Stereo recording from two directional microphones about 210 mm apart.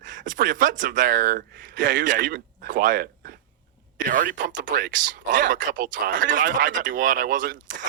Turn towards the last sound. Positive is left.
turn(degrees=-40)  # may be behind; listen again after turning